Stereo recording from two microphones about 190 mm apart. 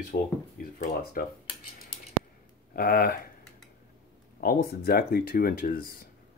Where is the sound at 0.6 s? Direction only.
50° left (ahead or behind).